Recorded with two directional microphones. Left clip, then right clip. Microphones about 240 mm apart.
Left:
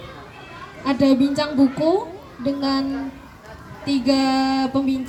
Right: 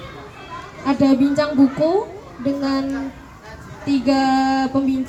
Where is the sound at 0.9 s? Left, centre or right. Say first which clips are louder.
Right 1 dB; left.